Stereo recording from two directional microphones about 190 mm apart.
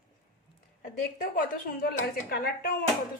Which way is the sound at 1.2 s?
45° left (ahead or behind).